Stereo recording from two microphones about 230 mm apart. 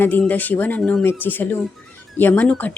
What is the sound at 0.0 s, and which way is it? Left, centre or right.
Speech, centre.